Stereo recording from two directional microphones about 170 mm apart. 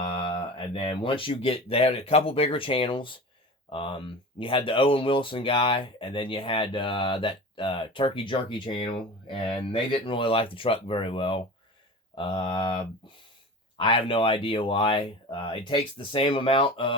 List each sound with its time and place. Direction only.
0.0 s speech: 30° left (ahead or behind)